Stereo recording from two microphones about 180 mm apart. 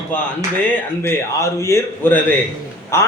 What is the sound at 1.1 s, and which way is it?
A man's voice, 15° left (ahead or behind).